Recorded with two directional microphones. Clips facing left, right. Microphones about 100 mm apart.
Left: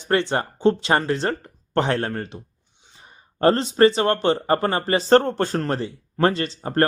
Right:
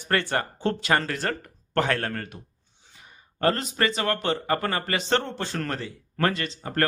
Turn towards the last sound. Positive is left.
turn(degrees=35)  # may be behind; listen again after turning